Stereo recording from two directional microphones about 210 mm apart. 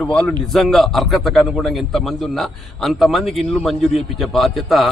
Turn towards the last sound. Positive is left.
turn(degrees=0)  # may be behind; listen again after turning